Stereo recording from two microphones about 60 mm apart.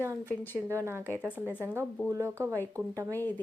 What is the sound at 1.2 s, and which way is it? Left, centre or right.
Speech, right.